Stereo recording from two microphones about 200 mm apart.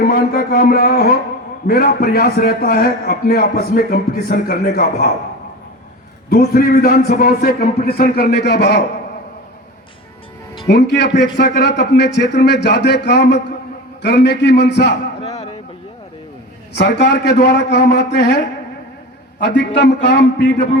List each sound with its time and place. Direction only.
0.0 s a man's voice: 45° left (ahead or behind)
6.3 s a man's voice: 45° left (ahead or behind)
10.7 s speech: 60° left (ahead or behind)
15.2 s a sound: 35° left (ahead or behind)
16.7 s speech: 55° left (ahead or behind)